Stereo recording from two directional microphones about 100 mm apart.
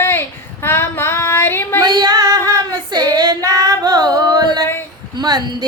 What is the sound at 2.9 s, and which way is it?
Child singing, 40° right (ahead or behind).